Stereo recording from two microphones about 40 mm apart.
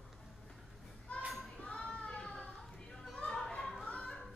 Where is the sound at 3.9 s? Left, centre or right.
Left.